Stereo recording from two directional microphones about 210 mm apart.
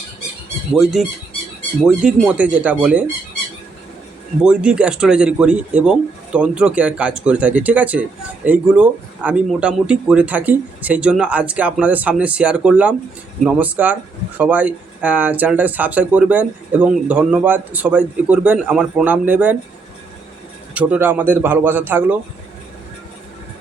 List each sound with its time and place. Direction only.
0.8 s speech: centre (ahead or behind)
4.4 s speech: 5° right (ahead or behind)
20.7 s speech: 10° right (ahead or behind)